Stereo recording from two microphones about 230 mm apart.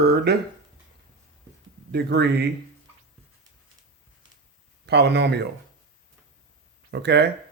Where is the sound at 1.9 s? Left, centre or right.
Right.